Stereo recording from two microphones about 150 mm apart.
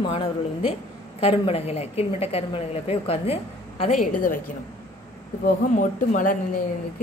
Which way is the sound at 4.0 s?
65° left (ahead or behind).